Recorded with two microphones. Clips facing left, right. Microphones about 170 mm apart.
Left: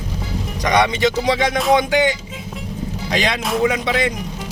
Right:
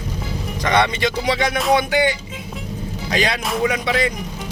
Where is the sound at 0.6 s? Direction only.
15° left (ahead or behind).